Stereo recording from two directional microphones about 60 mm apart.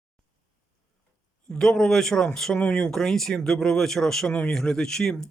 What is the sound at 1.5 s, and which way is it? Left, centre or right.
Speech, centre.